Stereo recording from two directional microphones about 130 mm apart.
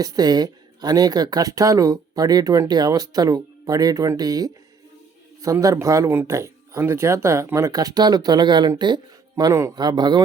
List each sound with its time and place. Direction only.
0.0 s speech: 30° right (ahead or behind)
9.3 s a man's voice: 25° right (ahead or behind)